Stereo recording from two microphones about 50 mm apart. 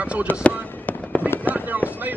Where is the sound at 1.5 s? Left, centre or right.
Right.